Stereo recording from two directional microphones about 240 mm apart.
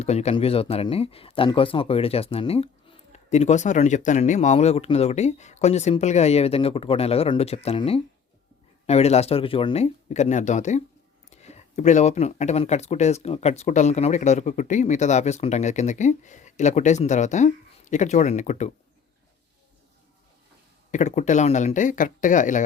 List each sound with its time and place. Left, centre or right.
0.0 s speech: left
20.9 s speech: left